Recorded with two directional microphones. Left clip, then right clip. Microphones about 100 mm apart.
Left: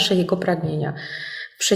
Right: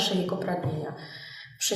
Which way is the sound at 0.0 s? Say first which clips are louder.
Left 8 dB; 35° left (ahead or behind).